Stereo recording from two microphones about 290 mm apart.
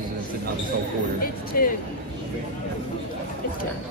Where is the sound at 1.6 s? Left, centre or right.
Left.